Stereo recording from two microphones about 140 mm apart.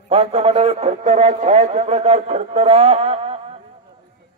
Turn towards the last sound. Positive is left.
turn(degrees=-45)  # may be behind; listen again after turning